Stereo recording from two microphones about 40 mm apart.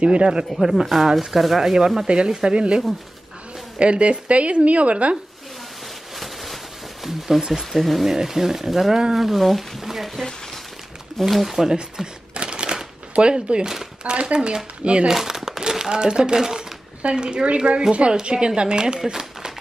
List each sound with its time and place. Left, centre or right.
0.0 s speech: right
0.5 s speech: centre
2.0 s speech: right
3.8 s a woman's voice: right
6.1 s speech: centre
11.1 s speech: centre
11.7 s shuffling cards: right
14.0 s speech: right
15.0 s speech: centre
17.0 s speech: right